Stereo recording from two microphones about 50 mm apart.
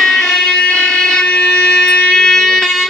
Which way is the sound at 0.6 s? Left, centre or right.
Centre.